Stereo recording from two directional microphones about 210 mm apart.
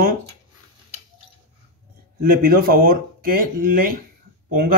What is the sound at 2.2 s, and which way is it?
A man's voice, 45° right (ahead or behind).